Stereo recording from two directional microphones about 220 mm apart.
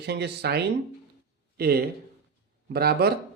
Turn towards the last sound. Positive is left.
turn(degrees=-45)  # may be behind; listen again after turning